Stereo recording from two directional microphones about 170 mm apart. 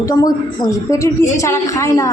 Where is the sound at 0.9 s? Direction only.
15° left (ahead or behind).